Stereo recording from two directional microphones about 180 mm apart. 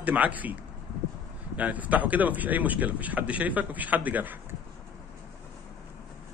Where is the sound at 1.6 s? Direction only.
10° right (ahead or behind).